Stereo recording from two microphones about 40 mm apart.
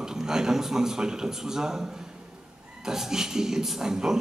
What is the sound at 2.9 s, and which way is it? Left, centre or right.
A man's voice, centre.